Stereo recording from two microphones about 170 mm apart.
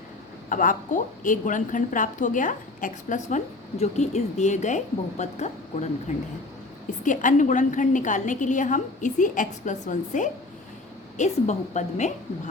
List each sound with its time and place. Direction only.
0.5 s speech: 50° left (ahead or behind)
7.0 s speech: 50° left (ahead or behind)